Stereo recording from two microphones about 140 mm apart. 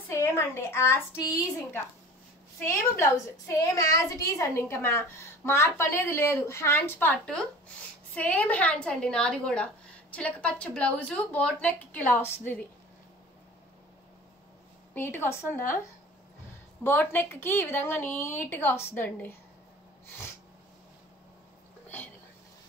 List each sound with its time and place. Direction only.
0.1 s a woman's voice: 15° left (ahead or behind)
15.0 s a woman's voice: 15° left (ahead or behind)
21.8 s whispering: 10° left (ahead or behind)